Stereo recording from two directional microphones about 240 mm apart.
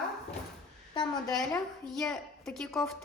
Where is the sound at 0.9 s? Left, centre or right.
Centre.